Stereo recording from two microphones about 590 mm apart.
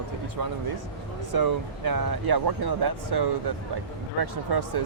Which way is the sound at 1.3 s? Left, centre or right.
Right.